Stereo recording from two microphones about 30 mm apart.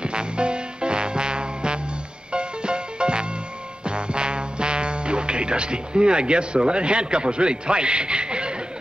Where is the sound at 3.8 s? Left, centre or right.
Right.